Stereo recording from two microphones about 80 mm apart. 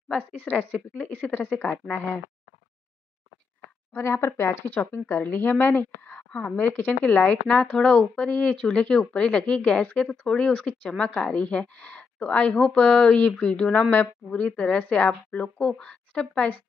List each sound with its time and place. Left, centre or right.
0.4 s a woman's voice: left
3.9 s speech: left